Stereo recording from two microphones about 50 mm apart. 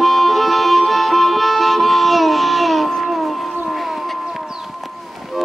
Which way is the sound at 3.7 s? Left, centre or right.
Centre.